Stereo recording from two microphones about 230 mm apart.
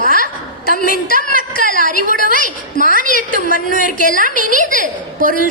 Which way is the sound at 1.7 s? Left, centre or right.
Left.